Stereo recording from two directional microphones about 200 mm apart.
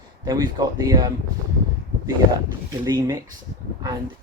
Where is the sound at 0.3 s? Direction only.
20° right (ahead or behind).